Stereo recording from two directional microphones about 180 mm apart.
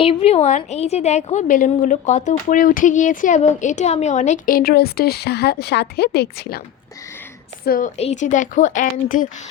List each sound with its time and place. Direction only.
0.0 s a woman's voice: 30° left (ahead or behind); by 6.6 s 65° left (ahead or behind)
7.6 s a woman's voice: 50° left (ahead or behind)